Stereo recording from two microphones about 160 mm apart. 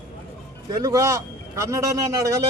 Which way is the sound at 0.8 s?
20° right (ahead or behind).